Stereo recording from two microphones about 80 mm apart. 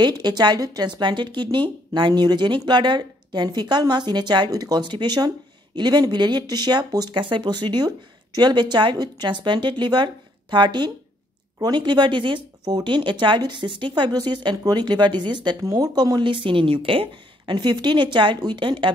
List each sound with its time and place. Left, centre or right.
0.0 s speech: right
12.7 s speech: right
15.6 s speech: right